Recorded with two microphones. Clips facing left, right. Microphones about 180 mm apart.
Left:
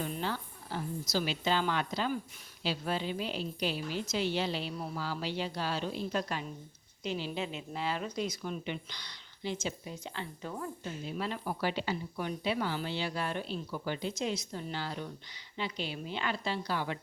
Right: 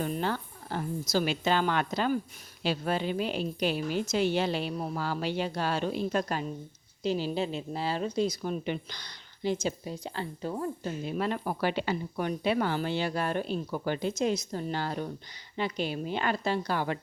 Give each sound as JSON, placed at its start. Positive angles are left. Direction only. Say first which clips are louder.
{"t": 0.0, "sound": "a sound", "louder": "right 5 dB", "side_deg": -50}
{"t": 2.6, "sound": "a woman's voice", "louder": "right 4 dB", "side_deg": -55}
{"t": 7.0, "sound": "a woman's voice", "louder": "right 6 dB", "side_deg": -35}
{"t": 11.0, "sound": "speech", "louder": "right 5 dB", "side_deg": -55}